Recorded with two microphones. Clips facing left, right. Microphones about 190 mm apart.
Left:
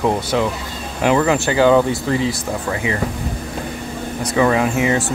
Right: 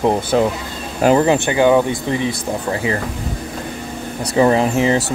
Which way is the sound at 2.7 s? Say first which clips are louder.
Right 2 dB; 35° right (ahead or behind).